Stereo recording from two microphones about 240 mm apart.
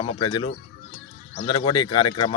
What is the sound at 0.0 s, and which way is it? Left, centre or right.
Speech, left.